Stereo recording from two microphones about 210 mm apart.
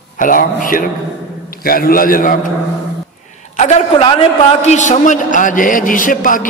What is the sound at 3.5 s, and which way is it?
A man's voice, 35° left (ahead or behind).